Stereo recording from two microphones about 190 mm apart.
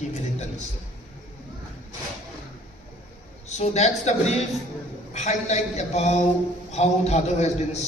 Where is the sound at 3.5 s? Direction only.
35° left (ahead or behind).